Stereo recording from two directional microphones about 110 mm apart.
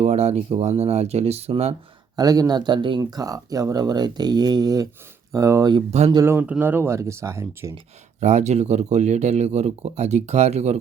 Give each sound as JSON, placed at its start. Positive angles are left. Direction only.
{"t": 0.0, "sound": "speech", "side_deg": -80}
{"t": 2.1, "sound": "speech", "side_deg": -35}
{"t": 3.0, "sound": "speech", "side_deg": -35}
{"t": 5.9, "sound": "speech", "side_deg": -85}
{"t": 6.4, "sound": "speech", "side_deg": -15}
{"t": 8.2, "sound": "speech", "side_deg": -90}